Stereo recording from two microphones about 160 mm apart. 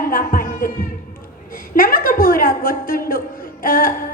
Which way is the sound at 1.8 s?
65° left (ahead or behind).